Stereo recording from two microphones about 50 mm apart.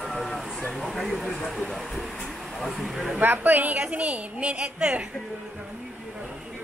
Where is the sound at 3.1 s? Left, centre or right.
Right.